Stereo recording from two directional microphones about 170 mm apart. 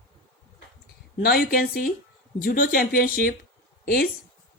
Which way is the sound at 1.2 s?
60° left (ahead or behind).